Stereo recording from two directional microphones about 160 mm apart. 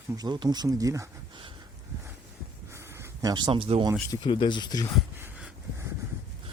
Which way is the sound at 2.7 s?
15° right (ahead or behind).